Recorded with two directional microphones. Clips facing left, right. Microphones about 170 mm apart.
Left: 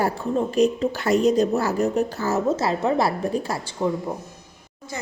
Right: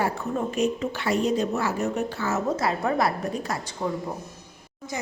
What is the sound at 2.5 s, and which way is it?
A woman's voice, 25° left (ahead or behind).